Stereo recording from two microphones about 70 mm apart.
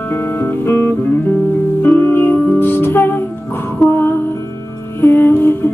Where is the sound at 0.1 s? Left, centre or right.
Left.